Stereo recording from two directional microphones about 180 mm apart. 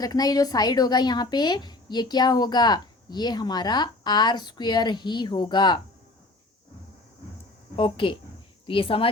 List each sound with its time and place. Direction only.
0.0 s a woman's voice: 20° left (ahead or behind)
7.8 s a woman's voice: 30° left (ahead or behind)